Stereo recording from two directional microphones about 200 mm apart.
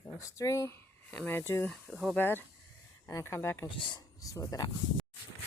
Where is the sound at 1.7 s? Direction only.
Centre (ahead or behind).